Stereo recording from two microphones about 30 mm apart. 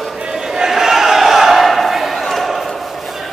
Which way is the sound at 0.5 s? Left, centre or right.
Centre.